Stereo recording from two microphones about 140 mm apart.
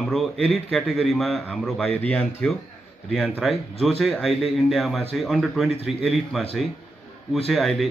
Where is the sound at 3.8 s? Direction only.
Centre (ahead or behind).